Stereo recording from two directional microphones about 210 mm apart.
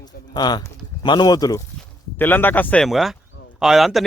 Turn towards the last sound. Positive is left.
turn(degrees=0)  # may be behind; listen again after turning